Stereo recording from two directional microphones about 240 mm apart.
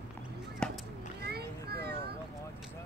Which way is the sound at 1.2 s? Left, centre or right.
Right.